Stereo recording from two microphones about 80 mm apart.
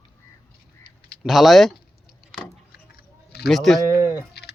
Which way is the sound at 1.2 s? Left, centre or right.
Centre.